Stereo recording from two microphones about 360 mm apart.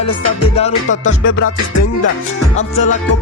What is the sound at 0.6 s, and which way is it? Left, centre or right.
Music, centre.